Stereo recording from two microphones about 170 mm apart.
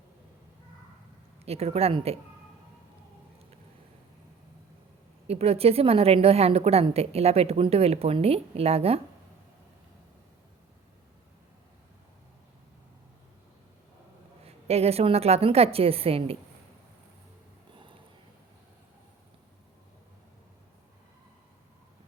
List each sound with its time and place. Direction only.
1.5 s a woman's voice: 35° right (ahead or behind)
5.3 s a woman's voice: 35° right (ahead or behind)
14.4 s a woman's voice: 35° right (ahead or behind)